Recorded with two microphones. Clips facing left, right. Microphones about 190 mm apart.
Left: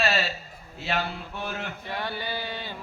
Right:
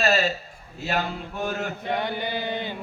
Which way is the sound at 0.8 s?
45° right (ahead or behind).